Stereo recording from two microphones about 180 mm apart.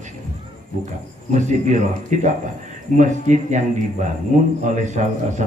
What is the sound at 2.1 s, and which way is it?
A man's voice, 45° right (ahead or behind).